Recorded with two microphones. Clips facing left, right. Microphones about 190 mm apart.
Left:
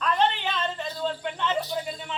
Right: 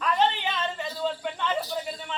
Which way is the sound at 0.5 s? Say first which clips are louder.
Left 1 dB; 5° right (ahead or behind).